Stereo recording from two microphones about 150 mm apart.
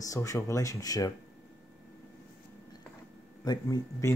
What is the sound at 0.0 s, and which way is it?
Speech, 20° left (ahead or behind).